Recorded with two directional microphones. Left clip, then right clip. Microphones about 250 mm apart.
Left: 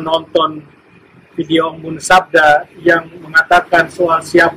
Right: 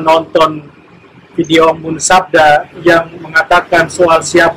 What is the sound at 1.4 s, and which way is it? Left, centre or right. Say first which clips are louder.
A man's voice: right 7 dB; centre.